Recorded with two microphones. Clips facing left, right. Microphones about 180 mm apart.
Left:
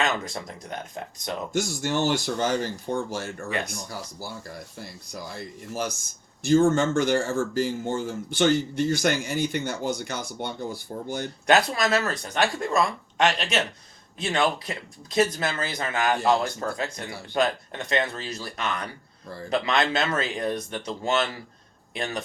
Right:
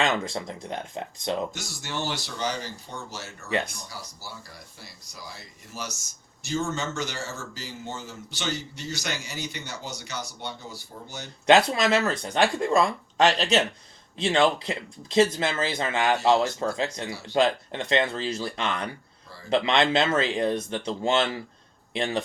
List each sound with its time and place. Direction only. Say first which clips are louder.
0.0 s speech: right 1 dB; 25° right (ahead or behind)
1.5 s speech: left 9 dB; 50° left (ahead or behind)
11.4 s speech: right 2 dB; 25° right (ahead or behind)
17.1 s speech: right 2 dB; 55° left (ahead or behind)
17.3 s speech: right 2 dB; 25° right (ahead or behind)